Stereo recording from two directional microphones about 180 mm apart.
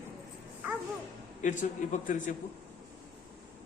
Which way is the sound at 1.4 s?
45° left (ahead or behind).